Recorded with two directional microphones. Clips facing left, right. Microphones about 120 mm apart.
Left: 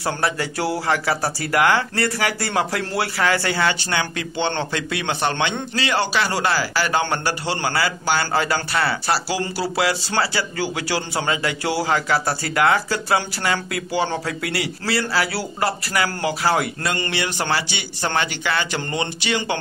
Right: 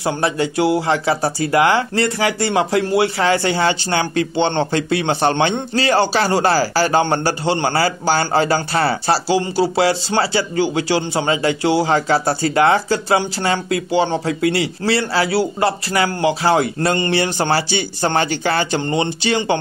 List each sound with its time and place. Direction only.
0.0 s a man's voice: 20° right (ahead or behind)